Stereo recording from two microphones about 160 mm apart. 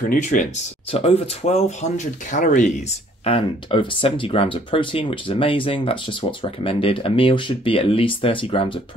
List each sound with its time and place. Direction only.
0.1 s speech: 55° left (ahead or behind)
0.9 s speech: 40° left (ahead or behind)
3.3 s speech: 35° left (ahead or behind)